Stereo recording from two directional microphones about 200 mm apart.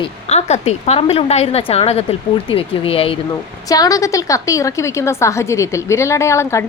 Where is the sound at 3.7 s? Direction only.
15° left (ahead or behind).